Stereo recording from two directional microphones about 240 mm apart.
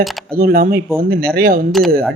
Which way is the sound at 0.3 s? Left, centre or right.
Right.